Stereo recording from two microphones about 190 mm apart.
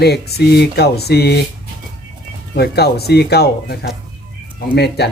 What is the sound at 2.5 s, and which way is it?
Speech, 55° left (ahead or behind).